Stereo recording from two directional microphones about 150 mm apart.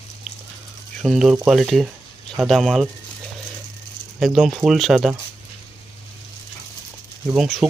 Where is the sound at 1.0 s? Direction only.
Centre (ahead or behind).